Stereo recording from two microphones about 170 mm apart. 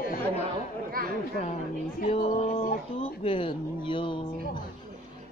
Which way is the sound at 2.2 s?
45° left (ahead or behind).